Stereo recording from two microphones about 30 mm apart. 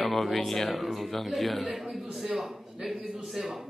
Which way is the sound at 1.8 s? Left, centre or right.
Centre.